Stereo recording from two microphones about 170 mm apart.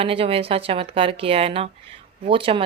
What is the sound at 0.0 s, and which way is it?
Speech, 35° right (ahead or behind).